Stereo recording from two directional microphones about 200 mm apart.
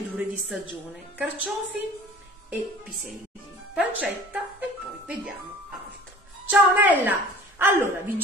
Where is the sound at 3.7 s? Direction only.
5° right (ahead or behind).